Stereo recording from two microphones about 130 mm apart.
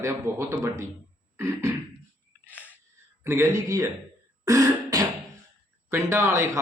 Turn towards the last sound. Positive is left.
turn(degrees=-20)  # may be behind; listen again after turning